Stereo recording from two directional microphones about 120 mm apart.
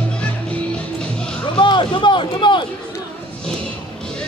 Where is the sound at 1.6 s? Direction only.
40° left (ahead or behind).